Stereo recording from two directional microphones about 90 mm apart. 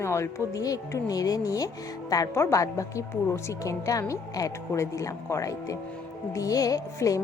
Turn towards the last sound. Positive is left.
turn(degrees=40)  # may be behind; listen again after turning